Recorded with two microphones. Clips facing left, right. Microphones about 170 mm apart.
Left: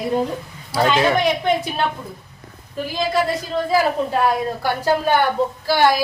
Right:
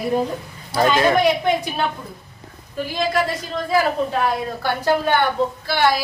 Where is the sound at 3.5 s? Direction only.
30° left (ahead or behind).